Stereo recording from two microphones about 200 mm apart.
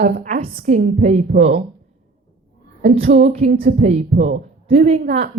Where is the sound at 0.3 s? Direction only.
30° right (ahead or behind).